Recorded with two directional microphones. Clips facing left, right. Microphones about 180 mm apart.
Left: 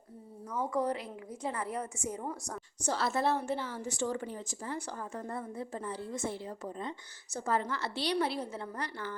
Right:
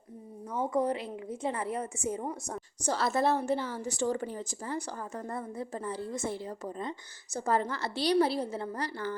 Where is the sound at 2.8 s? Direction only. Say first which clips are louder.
Right 3 dB; 40° right (ahead or behind).